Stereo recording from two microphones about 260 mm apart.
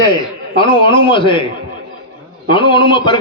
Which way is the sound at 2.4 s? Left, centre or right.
Centre.